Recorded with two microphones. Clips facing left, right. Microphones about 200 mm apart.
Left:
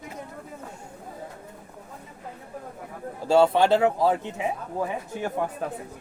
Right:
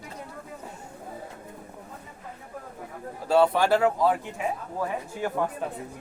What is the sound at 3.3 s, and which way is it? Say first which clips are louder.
Speech: left 2 dB; 25° left (ahead or behind).